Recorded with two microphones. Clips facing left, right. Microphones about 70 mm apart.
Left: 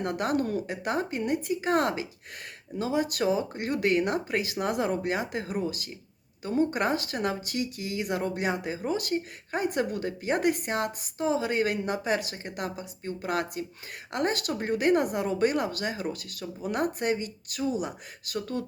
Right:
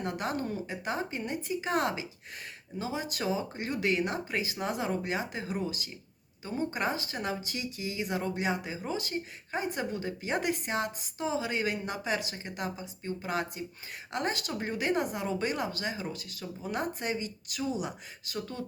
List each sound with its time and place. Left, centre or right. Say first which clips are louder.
0.0 s speech: left 5 dB; left